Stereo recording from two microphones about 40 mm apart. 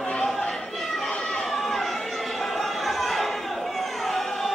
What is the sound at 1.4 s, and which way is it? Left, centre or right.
Chatter, centre.